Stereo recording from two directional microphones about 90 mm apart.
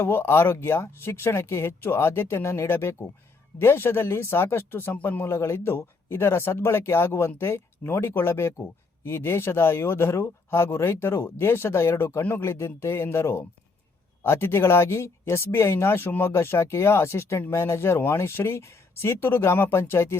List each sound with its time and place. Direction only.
0.0 s speech: 25° left (ahead or behind)